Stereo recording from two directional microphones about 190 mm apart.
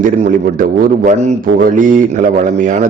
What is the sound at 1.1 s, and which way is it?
A man's voice, 45° right (ahead or behind).